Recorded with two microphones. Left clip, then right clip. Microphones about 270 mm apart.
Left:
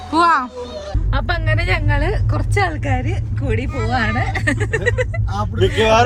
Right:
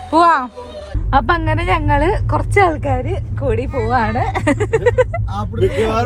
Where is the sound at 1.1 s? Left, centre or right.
Right.